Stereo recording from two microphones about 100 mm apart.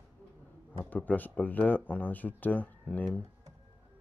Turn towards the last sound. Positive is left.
turn(degrees=15)  # may be behind; listen again after turning